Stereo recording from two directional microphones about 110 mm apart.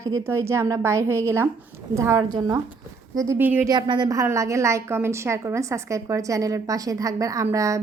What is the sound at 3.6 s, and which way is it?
A woman's voice, 35° right (ahead or behind).